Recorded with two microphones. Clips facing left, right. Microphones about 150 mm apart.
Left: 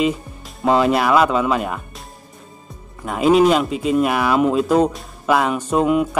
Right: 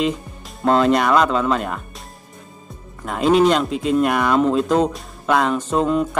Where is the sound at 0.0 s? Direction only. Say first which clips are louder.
Left 2 dB; 5° left (ahead or behind).